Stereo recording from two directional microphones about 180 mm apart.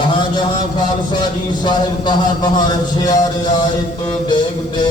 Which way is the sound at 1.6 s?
25° left (ahead or behind).